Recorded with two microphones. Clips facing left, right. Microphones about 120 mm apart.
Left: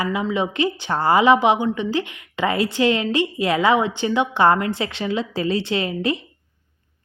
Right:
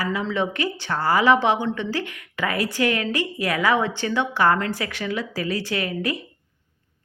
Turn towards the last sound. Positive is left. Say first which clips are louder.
# left 3 dB
turn(degrees=25)  # may be behind; listen again after turning